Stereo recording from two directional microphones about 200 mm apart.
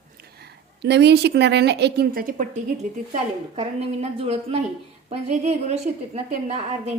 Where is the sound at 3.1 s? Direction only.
30° right (ahead or behind).